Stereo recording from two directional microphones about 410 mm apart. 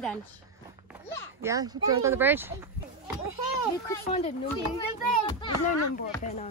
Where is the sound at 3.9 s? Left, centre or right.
Centre.